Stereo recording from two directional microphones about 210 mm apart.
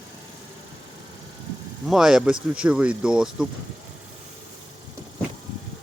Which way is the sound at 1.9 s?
Centre (ahead or behind).